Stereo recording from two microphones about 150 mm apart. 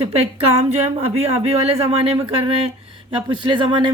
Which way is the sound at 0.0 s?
45° right (ahead or behind).